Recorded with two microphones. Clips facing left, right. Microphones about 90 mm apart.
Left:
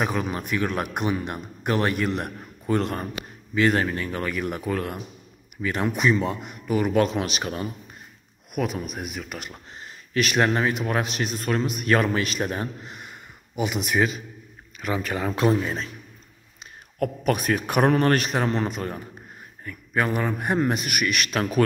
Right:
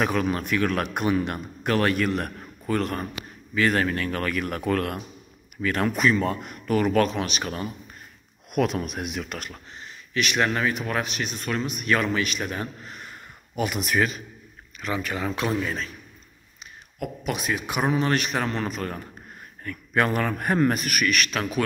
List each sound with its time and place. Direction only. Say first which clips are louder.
0.0 s a man's voice: right 2 dB; 20° left (ahead or behind)
8.5 s speech: right 3 dB; 5° left (ahead or behind)
9.8 s a man's voice: left 3 dB; 35° left (ahead or behind)
12.8 s a sound: even; 15° left (ahead or behind)
13.6 s a man's voice: left 1 dB; 20° left (ahead or behind)
15.0 s a man's voice: left 3 dB; 35° left (ahead or behind)
17.0 s a man's voice: left 5 dB; 50° left (ahead or behind)
18.1 s a man's voice: left 2 dB; 35° left (ahead or behind)
19.6 s a man's voice: right 1 dB; 10° left (ahead or behind)
20.2 s a man's voice: right 1 dB; 15° left (ahead or behind); by 21.6 s 35° left (ahead or behind)